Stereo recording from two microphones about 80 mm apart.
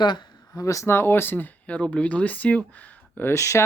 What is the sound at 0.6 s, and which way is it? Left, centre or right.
Speech, left.